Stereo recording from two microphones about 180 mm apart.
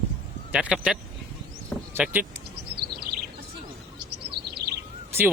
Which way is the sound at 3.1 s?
55° right (ahead or behind).